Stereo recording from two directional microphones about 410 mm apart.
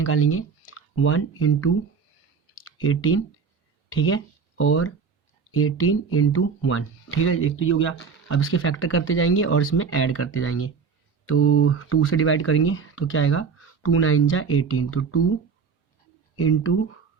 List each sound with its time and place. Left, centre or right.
0.0 s speech: left
2.8 s speech: left
16.4 s speech: left